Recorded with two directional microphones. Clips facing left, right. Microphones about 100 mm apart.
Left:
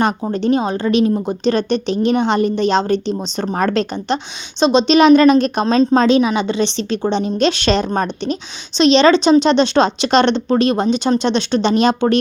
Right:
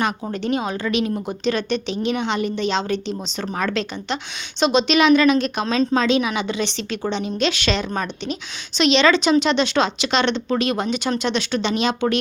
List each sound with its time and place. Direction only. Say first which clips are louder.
0.2 s a woman's voice: left 7 dB; 30° left (ahead or behind)